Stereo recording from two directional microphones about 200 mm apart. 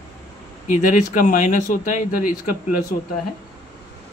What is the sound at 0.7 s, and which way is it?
Speech, 40° left (ahead or behind).